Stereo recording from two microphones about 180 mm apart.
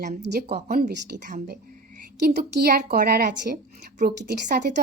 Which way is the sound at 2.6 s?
60° right (ahead or behind).